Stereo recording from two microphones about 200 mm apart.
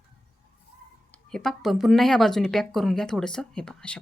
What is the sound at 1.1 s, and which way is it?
A woman's voice, centre (ahead or behind).